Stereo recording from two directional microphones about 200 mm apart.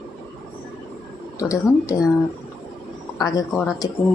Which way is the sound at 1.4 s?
15° left (ahead or behind).